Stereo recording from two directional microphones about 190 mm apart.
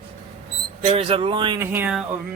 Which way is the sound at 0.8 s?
30° right (ahead or behind).